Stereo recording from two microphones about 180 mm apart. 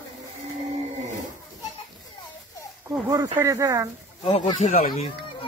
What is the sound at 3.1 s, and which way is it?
Speech, 20° right (ahead or behind).